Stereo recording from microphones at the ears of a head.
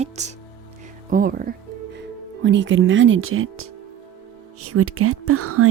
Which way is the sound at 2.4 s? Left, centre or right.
Right.